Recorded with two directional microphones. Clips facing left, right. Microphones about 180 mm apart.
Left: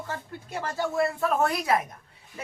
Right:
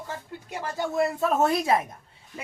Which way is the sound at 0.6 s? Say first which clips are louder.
Right 1 dB; 15° right (ahead or behind).